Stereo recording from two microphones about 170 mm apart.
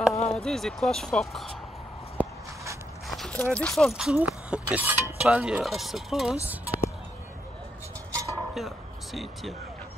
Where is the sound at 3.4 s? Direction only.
5° left (ahead or behind).